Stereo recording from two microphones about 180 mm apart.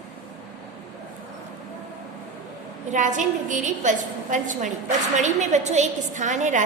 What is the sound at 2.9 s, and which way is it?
A woman's voice, 45° right (ahead or behind).